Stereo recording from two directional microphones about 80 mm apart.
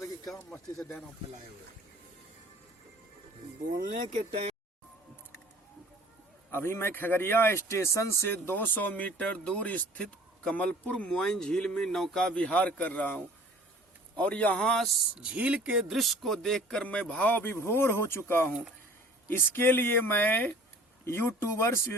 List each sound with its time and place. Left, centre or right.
0.8 s speech: centre
6.5 s a man's voice: left; by 14.9 s centre
15.2 s a man's voice: centre; by 21.8 s left